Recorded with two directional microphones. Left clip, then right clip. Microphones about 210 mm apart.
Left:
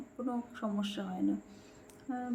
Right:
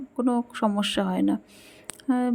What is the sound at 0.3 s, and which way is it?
Speech, 45° right (ahead or behind).